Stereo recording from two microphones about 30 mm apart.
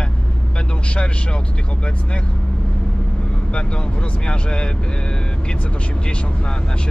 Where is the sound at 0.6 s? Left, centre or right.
Left.